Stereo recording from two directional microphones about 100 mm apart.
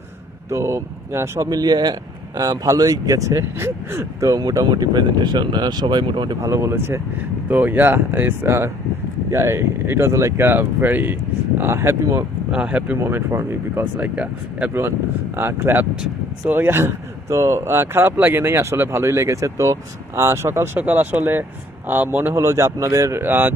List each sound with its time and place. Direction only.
0.5 s speech: 25° right (ahead or behind)
4.4 s speech: 45° right (ahead or behind)
6.4 s a man's voice: 25° right (ahead or behind)
12.4 s speech: 10° right (ahead or behind)
12.9 s a man's voice: 25° right (ahead or behind)
13.9 s speech: 15° right (ahead or behind)
14.7 s a man's voice: 25° right (ahead or behind)